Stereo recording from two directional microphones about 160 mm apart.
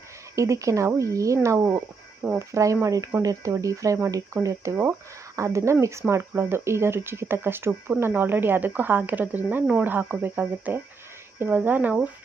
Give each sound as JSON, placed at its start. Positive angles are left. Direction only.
{"t": 0.3, "sound": "speech", "side_deg": -20}